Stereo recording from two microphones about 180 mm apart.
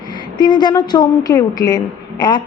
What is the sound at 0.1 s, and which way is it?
A woman's voice, 25° left (ahead or behind).